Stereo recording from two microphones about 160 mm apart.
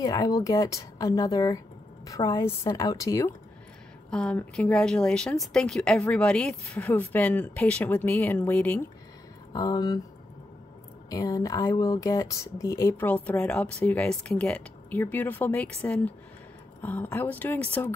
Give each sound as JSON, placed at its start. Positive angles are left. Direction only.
{"t": 0.0, "sound": "speech", "side_deg": 25}
{"t": 4.1, "sound": "speech", "side_deg": 5}
{"t": 9.5, "sound": "speech", "side_deg": 25}
{"t": 11.1, "sound": "speech", "side_deg": 20}